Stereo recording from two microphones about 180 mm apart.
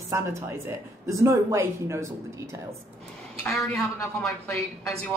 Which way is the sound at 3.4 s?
5° left (ahead or behind).